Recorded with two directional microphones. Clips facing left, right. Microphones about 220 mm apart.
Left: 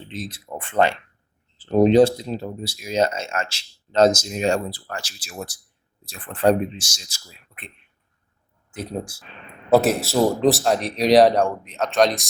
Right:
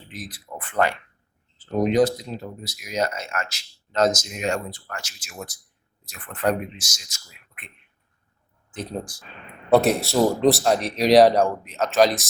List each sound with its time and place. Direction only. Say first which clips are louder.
0.1 s speech: left 4 dB; 25° left (ahead or behind)
8.7 s speech: left 2 dB; 5° left (ahead or behind)